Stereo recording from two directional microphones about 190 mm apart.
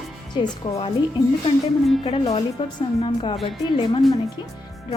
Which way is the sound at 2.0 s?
30° left (ahead or behind).